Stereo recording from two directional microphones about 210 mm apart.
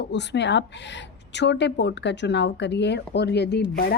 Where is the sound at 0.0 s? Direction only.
55° left (ahead or behind).